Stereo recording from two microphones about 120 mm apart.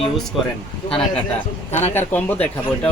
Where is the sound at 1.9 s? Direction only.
10° left (ahead or behind).